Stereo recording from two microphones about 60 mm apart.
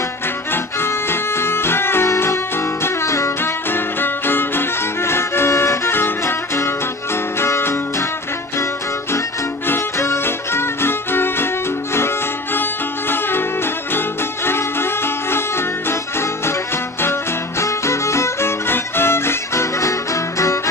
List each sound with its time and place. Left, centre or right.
0.5 s music: left
9.7 s music: left
13.1 s music: left